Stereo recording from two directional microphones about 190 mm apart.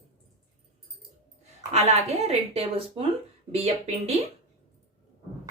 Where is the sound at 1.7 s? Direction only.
35° right (ahead or behind).